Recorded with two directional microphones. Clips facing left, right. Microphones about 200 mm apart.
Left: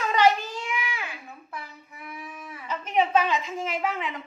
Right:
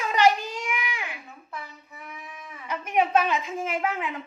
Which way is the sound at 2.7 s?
10° right (ahead or behind).